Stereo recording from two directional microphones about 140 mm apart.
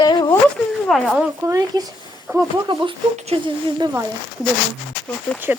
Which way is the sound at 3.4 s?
35° right (ahead or behind).